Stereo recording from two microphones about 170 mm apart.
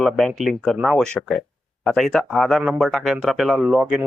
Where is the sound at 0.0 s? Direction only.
Centre (ahead or behind).